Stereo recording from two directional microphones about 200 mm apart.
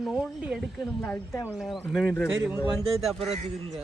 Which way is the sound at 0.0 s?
Centre (ahead or behind).